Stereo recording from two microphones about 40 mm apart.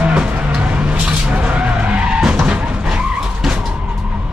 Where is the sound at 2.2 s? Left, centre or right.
Right.